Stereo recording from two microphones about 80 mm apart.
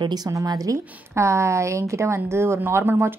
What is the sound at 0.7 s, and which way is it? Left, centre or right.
A woman's voice, right.